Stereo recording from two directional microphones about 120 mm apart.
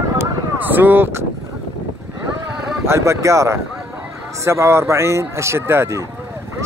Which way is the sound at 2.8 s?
25° right (ahead or behind).